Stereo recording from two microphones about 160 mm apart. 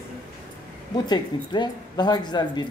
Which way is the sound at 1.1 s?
25° left (ahead or behind).